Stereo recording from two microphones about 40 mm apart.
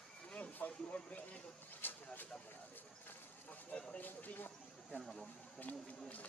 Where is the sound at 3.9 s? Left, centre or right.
Left.